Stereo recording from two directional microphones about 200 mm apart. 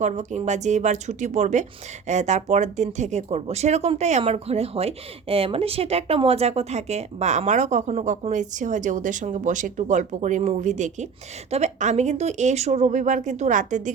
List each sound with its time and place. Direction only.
0.0 s speech: 35° right (ahead or behind)